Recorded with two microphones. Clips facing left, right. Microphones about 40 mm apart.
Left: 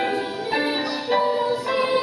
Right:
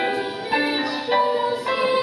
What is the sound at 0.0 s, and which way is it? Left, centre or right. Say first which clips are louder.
Music: even; centre.